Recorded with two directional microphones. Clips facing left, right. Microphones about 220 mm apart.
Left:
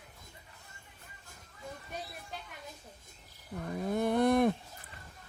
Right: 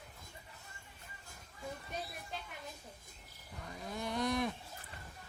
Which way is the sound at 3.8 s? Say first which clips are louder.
Left 10 dB; 55° left (ahead or behind).